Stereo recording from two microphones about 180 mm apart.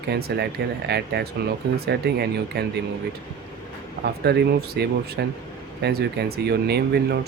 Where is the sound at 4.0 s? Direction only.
65° right (ahead or behind).